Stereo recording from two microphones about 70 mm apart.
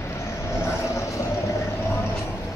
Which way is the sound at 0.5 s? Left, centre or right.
Left.